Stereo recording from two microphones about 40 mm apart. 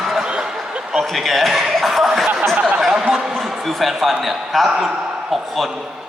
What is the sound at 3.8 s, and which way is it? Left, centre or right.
A man's voice, centre.